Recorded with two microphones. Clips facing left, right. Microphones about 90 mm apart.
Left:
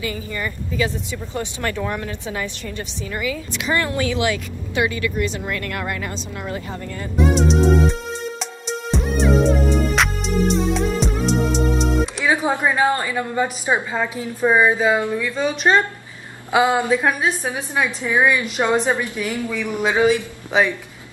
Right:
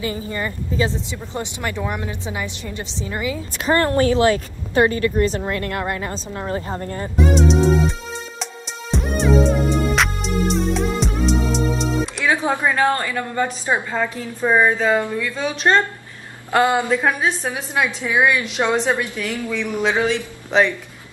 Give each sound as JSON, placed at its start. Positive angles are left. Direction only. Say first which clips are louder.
{"t": 0.0, "sound": "speech", "louder": "right 2 dB", "side_deg": -30}
{"t": 3.5, "sound": "a woman's voice", "louder": "right 6 dB", "side_deg": -40}
{"t": 7.2, "sound": "speech", "louder": "even", "side_deg": 0}
{"t": 8.4, "sound": "music", "louder": "left 4 dB", "side_deg": 0}
{"t": 12.3, "sound": "a woman's voice", "louder": "even", "side_deg": 10}